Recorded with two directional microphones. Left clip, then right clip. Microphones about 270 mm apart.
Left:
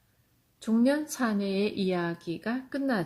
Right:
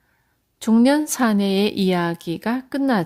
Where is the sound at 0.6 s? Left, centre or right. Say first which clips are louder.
Right 9 dB; right.